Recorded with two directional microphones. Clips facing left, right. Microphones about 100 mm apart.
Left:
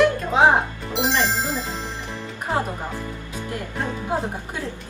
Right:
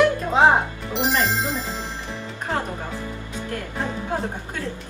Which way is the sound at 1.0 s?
Centre (ahead or behind).